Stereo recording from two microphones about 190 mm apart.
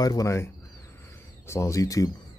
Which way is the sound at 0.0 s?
20° left (ahead or behind).